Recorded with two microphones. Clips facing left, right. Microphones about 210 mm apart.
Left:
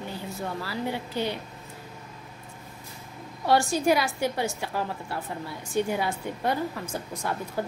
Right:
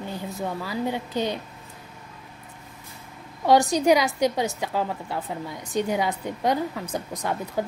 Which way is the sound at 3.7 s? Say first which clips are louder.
Right 4 dB; 15° right (ahead or behind).